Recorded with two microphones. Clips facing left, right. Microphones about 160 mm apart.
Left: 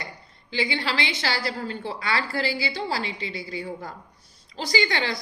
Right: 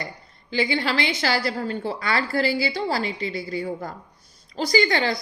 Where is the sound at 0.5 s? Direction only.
40° right (ahead or behind).